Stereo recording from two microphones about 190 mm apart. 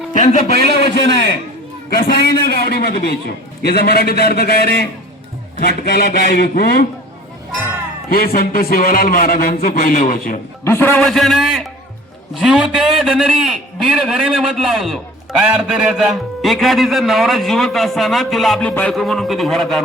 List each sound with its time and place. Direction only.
0.1 s a man's voice: 35° left (ahead or behind)
0.7 s a man's voice: 55° left (ahead or behind)
8.1 s a man's voice: 50° left (ahead or behind)
10.6 s a man's voice: 10° left (ahead or behind)